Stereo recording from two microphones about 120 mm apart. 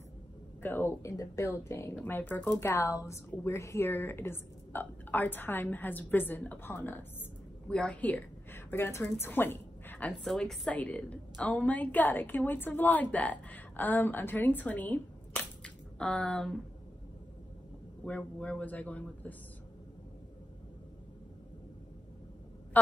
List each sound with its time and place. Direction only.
0.6 s a woman's voice: 15° left (ahead or behind)
18.0 s a woman's voice: 10° left (ahead or behind)